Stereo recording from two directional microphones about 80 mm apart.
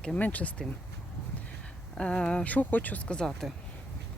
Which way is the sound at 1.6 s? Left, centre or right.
Centre.